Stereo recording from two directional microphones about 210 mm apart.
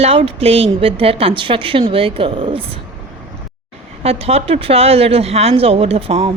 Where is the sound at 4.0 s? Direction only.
30° right (ahead or behind).